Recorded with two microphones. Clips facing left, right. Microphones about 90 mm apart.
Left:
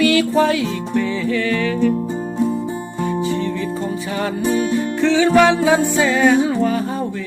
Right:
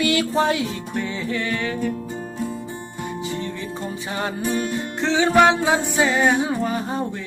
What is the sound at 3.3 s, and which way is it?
Music, 20° right (ahead or behind).